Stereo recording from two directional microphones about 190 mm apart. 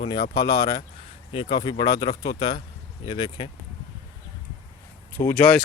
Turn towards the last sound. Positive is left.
turn(degrees=5)  # may be behind; listen again after turning